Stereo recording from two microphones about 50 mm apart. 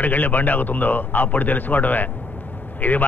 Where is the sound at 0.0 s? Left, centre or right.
Left.